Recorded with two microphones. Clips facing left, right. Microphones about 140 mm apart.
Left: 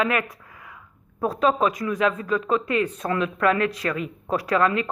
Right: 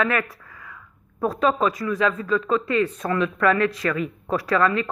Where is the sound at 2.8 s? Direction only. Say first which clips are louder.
Right 1 dB; 40° left (ahead or behind).